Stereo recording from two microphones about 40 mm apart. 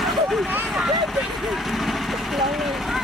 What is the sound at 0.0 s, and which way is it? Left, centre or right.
Vehicle, centre.